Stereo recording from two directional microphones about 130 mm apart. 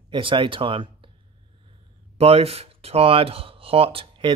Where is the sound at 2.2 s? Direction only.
50° right (ahead or behind).